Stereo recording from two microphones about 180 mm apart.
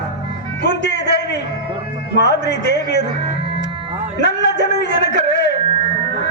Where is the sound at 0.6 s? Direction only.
70° left (ahead or behind).